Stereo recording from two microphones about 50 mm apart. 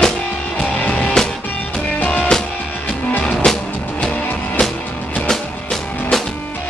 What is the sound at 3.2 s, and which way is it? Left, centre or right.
Music, centre.